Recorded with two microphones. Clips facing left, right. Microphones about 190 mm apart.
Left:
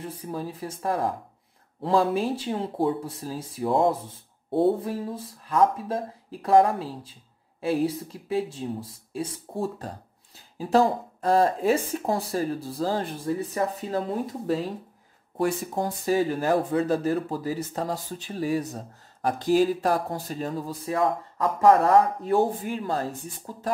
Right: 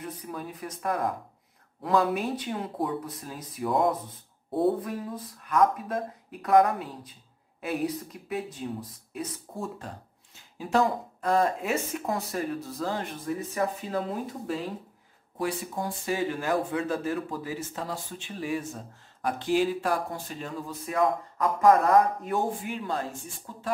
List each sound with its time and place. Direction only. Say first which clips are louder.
0.0 s speech: left 4 dB; 30° left (ahead or behind)
15.7 s speech: left 6 dB; 35° left (ahead or behind)